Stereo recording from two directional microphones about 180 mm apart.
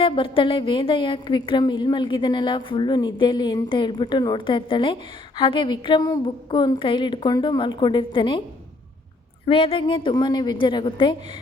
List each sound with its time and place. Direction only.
0.0 s a woman's voice: 30° left (ahead or behind)
9.5 s a woman's voice: 30° left (ahead or behind)